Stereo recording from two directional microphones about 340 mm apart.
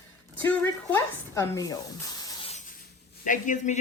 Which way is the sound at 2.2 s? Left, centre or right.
Centre.